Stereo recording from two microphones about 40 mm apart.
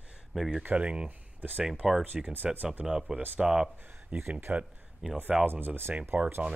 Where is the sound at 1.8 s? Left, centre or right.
Centre.